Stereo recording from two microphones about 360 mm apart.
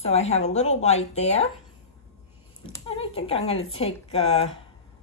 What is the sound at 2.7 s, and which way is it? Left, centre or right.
A woman's voice, centre.